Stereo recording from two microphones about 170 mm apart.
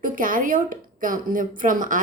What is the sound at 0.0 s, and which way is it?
A woman's voice, 55° right (ahead or behind).